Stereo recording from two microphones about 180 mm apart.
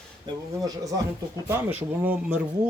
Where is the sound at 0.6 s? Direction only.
20° right (ahead or behind).